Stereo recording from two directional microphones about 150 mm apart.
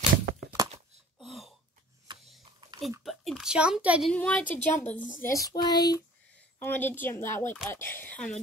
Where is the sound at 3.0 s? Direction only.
Centre (ahead or behind).